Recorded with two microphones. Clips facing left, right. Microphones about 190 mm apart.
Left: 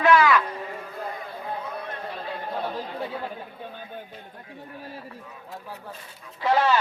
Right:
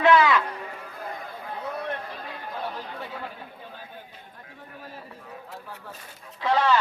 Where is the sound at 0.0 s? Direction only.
20° right (ahead or behind).